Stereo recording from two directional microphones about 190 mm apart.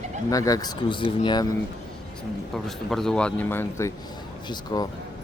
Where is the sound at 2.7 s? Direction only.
Centre (ahead or behind); by 4.9 s 20° left (ahead or behind).